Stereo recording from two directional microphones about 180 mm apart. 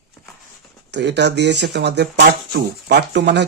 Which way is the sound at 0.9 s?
70° right (ahead or behind).